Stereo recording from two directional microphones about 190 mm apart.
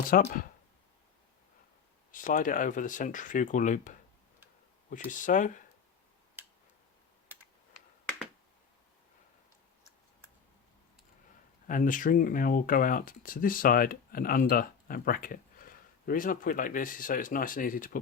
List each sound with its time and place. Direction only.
0.1 s speech: 45° left (ahead or behind)
2.1 s speech: 45° left (ahead or behind)
11.7 s speech: 45° left (ahead or behind)